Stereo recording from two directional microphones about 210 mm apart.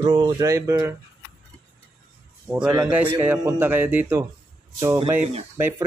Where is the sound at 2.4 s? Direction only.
5° right (ahead or behind).